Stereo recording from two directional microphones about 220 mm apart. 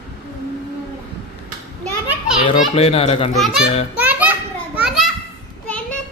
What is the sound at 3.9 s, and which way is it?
Children playing, 5° right (ahead or behind).